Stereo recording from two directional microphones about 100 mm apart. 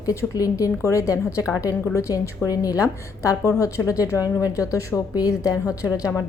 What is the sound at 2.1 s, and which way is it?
Speech, 40° left (ahead or behind).